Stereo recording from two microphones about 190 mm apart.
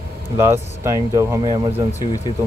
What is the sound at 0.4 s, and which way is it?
Speech, 15° right (ahead or behind).